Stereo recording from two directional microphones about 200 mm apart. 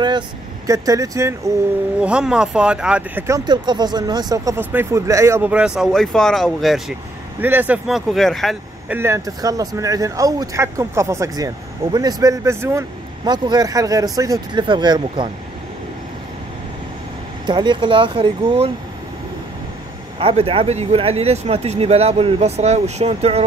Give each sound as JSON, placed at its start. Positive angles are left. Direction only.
{"t": 0.7, "sound": "speech", "side_deg": -15}
{"t": 2.0, "sound": "speech", "side_deg": -5}
{"t": 7.3, "sound": "speech", "side_deg": -10}
{"t": 8.9, "sound": "speech", "side_deg": -15}
{"t": 17.5, "sound": "speech", "side_deg": -25}
{"t": 20.2, "sound": "speech", "side_deg": -25}